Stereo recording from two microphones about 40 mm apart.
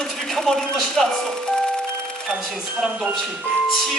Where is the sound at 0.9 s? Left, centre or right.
Centre.